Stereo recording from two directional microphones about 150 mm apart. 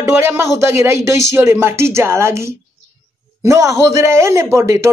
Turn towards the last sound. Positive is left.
turn(degrees=-20)  # may be behind; listen again after turning